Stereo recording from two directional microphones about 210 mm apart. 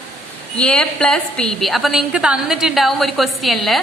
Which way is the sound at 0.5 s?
5° left (ahead or behind).